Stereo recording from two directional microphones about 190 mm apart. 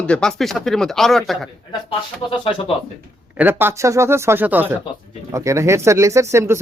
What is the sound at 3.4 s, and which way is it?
Speech, 10° right (ahead or behind).